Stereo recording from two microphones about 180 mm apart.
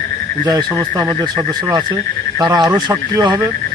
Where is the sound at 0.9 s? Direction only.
20° right (ahead or behind).